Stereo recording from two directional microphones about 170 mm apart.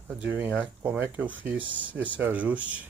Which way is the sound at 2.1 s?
10° right (ahead or behind).